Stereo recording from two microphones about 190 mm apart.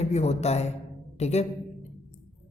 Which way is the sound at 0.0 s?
35° left (ahead or behind).